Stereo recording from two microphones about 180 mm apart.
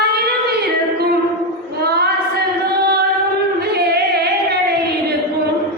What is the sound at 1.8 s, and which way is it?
Child singing, 60° right (ahead or behind).